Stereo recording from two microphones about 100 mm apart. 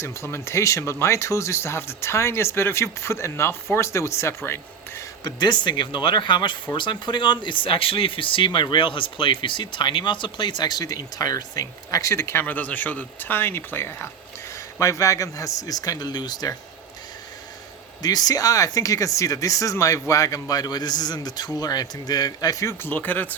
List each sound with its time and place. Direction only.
0.0 s speech: 30° left (ahead or behind)
5.2 s speech: 50° left (ahead or behind)
18.0 s speech: 40° left (ahead or behind)
22.6 s speech: 20° left (ahead or behind)